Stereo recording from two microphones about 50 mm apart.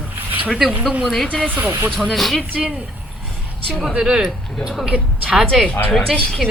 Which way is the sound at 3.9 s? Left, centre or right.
Centre.